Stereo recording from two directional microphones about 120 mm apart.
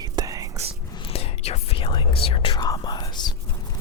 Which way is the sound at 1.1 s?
60° left (ahead or behind).